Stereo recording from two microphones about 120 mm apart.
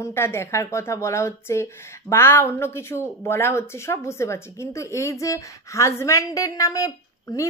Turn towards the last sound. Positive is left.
turn(degrees=25)  # may be behind; listen again after turning